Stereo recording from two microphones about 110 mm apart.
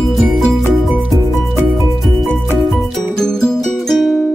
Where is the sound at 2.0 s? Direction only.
Centre (ahead or behind).